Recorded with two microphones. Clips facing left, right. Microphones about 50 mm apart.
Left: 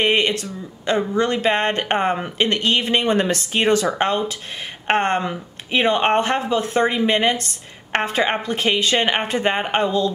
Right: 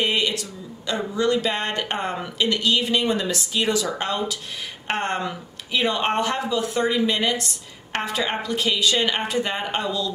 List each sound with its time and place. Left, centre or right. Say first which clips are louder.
0.0 s speech: left 4 dB; left